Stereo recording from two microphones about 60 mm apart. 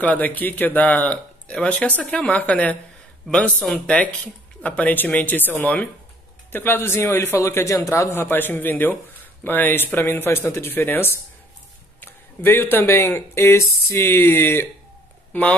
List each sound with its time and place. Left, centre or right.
0.0 s speech: left
3.8 s a man's voice: left
13.8 s speech: left